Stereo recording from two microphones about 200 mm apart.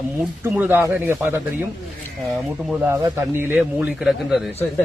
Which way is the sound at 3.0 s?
10° right (ahead or behind).